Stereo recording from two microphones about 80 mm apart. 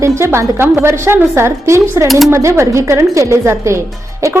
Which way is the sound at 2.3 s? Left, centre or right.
Right.